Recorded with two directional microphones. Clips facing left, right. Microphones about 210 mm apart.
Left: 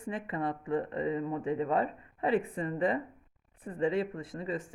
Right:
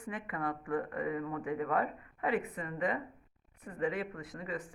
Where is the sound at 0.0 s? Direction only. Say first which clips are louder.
Left 4 dB; 25° left (ahead or behind).